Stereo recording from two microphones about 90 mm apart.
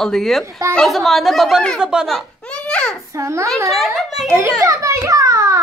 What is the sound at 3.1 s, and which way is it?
Speech, 35° right (ahead or behind).